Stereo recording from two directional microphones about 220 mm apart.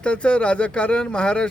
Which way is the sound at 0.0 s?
5° left (ahead or behind).